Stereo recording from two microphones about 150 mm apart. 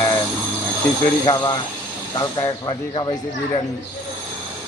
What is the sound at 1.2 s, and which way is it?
Speech, 25° left (ahead or behind).